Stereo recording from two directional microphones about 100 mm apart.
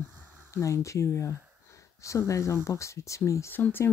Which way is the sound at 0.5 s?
30° left (ahead or behind).